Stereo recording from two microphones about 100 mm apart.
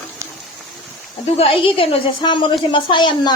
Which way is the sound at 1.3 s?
70° left (ahead or behind).